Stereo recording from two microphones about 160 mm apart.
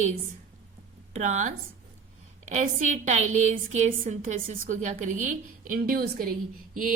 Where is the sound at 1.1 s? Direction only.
50° right (ahead or behind).